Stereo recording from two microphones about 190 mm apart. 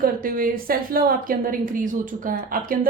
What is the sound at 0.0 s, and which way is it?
A woman's voice, 50° right (ahead or behind).